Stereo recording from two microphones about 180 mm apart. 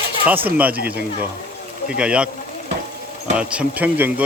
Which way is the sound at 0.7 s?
60° right (ahead or behind).